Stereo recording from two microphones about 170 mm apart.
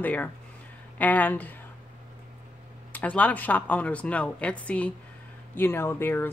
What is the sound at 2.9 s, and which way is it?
Speech, 10° left (ahead or behind).